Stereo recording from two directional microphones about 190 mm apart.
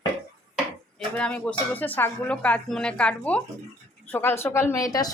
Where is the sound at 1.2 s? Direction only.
5° left (ahead or behind).